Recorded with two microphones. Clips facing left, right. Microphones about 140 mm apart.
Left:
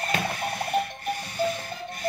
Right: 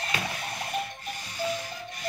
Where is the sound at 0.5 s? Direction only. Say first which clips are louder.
Left 7 dB; 60° left (ahead or behind).